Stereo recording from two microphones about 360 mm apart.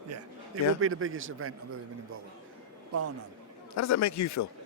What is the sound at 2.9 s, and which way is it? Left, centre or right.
Speech, right.